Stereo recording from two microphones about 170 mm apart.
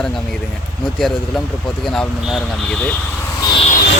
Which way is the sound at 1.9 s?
Centre (ahead or behind).